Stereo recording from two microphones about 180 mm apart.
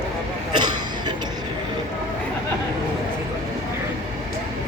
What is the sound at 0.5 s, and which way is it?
Cough, 25° right (ahead or behind).